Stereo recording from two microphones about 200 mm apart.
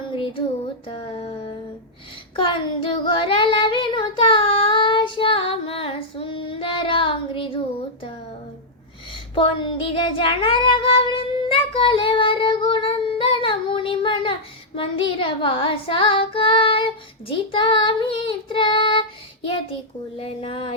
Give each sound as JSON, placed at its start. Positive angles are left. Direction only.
{"t": 0.9, "sound": "music", "side_deg": 25}
{"t": 2.3, "sound": "child singing", "side_deg": 25}
{"t": 9.3, "sound": "child singing", "side_deg": 25}
{"t": 20.1, "sound": "speech", "side_deg": 30}